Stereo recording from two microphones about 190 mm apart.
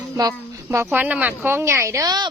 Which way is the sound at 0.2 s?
15° right (ahead or behind).